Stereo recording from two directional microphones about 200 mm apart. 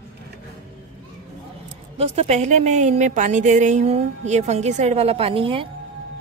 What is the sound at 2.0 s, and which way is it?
A woman's voice, 30° right (ahead or behind).